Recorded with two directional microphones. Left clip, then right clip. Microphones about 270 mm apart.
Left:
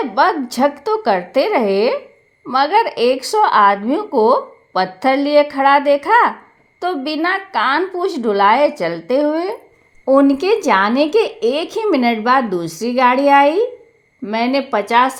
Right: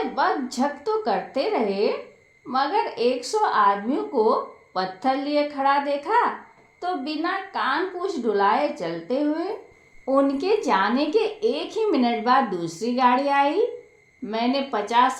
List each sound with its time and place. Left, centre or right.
0.1 s speech: left